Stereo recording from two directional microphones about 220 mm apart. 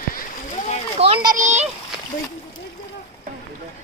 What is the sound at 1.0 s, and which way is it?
Speech, 25° right (ahead or behind).